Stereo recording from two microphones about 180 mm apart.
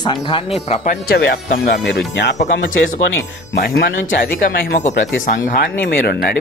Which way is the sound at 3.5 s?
75° left (ahead or behind).